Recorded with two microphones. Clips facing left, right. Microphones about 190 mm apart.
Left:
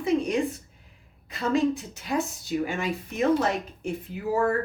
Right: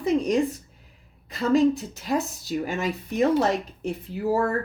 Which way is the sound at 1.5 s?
40° right (ahead or behind).